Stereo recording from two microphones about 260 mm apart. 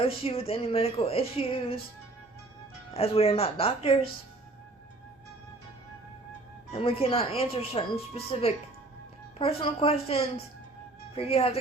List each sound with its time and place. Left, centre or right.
0.0 s speech: left
2.9 s speech: left
6.7 s speech: left